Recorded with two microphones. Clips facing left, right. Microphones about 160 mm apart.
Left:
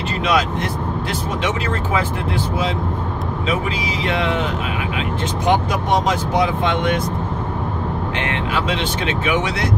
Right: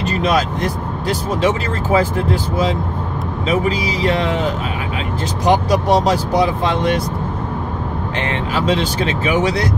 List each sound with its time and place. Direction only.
0.2 s speech: 40° right (ahead or behind)
3.4 s speech: 40° right (ahead or behind)
8.3 s speech: 40° right (ahead or behind)